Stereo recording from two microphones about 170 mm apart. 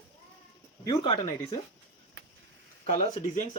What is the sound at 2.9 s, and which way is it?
Speech, 45° left (ahead or behind).